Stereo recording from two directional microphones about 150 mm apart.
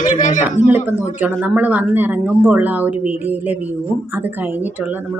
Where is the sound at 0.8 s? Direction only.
15° left (ahead or behind).